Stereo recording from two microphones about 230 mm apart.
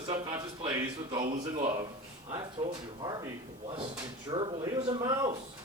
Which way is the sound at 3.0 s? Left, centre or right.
Centre.